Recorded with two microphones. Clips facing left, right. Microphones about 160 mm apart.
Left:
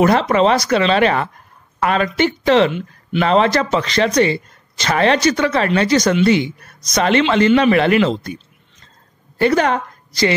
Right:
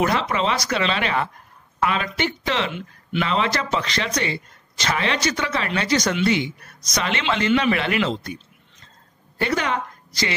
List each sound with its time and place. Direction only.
0.0 s speech: 45° left (ahead or behind)
9.4 s a woman's voice: 45° left (ahead or behind)